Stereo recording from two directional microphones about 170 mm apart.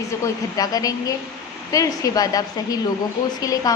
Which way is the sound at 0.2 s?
20° left (ahead or behind).